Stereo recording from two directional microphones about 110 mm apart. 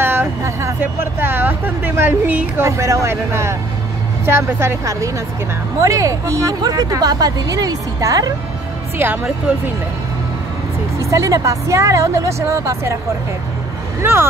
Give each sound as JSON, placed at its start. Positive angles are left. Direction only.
{"t": 0.0, "sound": "vehicle", "side_deg": -20}
{"t": 1.2, "sound": "speech", "side_deg": -20}
{"t": 8.9, "sound": "speech", "side_deg": -20}
{"t": 11.0, "sound": "speech", "side_deg": -30}
{"t": 14.0, "sound": "speech", "side_deg": -20}